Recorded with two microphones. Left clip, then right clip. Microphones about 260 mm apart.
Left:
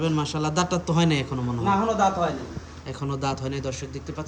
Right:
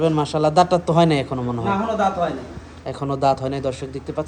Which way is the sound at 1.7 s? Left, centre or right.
Left.